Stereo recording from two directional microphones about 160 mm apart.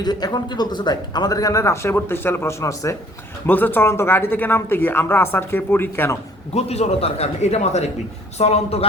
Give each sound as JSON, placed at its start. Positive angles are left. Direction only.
{"t": 0.0, "sound": "speech", "side_deg": 25}
{"t": 6.5, "sound": "a man's voice", "side_deg": 40}